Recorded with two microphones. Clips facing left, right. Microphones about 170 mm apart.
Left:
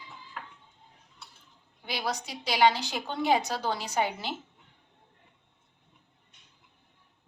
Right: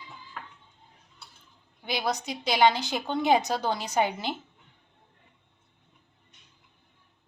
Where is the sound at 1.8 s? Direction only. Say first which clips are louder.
Right 4 dB; 20° right (ahead or behind).